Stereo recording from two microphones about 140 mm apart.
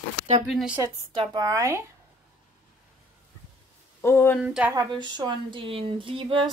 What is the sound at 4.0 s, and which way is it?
Speech, 15° left (ahead or behind).